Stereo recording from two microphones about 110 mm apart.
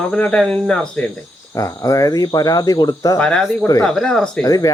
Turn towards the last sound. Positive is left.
turn(degrees=30)  # may be behind; listen again after turning